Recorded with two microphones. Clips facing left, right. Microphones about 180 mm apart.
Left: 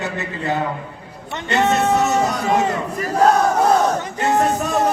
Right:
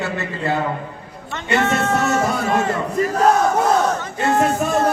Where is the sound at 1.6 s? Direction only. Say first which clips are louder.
Left 3 dB; 15° left (ahead or behind).